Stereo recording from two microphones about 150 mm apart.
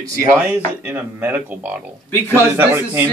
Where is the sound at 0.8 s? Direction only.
10° right (ahead or behind).